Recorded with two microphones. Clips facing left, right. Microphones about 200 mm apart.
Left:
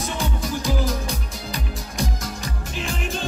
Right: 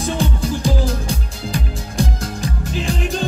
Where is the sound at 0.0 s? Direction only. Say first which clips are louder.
Right 6 dB; 30° right (ahead or behind).